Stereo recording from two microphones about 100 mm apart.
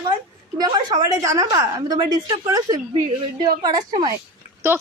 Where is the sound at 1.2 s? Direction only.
30° right (ahead or behind).